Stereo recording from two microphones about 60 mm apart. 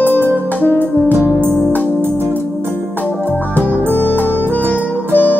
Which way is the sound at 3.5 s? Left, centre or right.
Left.